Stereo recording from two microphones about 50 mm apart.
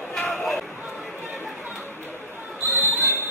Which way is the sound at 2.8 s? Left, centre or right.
Right.